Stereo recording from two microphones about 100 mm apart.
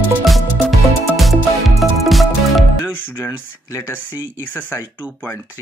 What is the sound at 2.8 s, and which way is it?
Speech, 25° left (ahead or behind).